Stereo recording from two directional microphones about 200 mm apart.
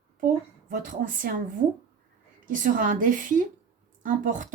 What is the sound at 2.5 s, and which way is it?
A woman's voice, 40° right (ahead or behind).